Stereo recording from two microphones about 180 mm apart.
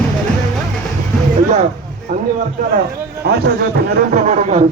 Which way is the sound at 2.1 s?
50° right (ahead or behind).